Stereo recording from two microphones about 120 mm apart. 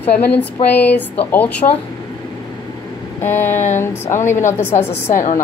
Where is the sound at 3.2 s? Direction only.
15° left (ahead or behind).